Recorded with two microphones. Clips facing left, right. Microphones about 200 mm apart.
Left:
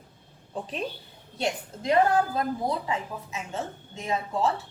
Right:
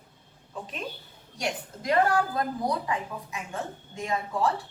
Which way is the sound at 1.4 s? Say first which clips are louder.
Left 3 dB; 25° left (ahead or behind).